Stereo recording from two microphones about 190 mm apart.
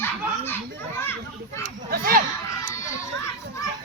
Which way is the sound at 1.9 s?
50° right (ahead or behind).